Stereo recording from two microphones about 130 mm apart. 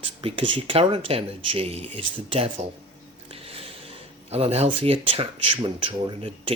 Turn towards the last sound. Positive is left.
turn(degrees=-45)  # may be behind; listen again after turning